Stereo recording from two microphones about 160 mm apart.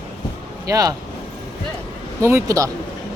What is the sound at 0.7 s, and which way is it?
Speech, 20° right (ahead or behind).